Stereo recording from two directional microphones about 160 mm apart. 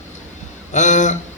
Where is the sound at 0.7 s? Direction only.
50° left (ahead or behind).